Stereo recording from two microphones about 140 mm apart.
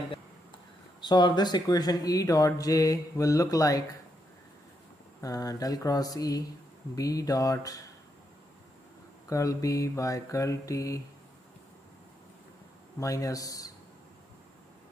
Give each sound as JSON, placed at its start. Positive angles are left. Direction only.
{"t": 1.0, "sound": "speech", "side_deg": 30}
{"t": 5.2, "sound": "speech", "side_deg": 25}
{"t": 9.3, "sound": "speech", "side_deg": 25}
{"t": 13.0, "sound": "speech", "side_deg": 25}